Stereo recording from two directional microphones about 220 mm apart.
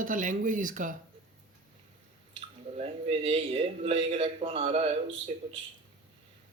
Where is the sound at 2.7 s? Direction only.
30° right (ahead or behind).